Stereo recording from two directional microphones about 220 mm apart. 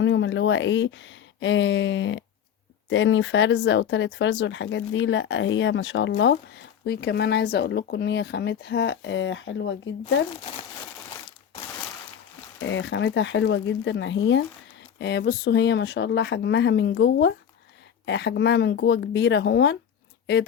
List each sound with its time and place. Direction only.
0.0 s speech: 55° left (ahead or behind)
12.5 s speech: 55° left (ahead or behind)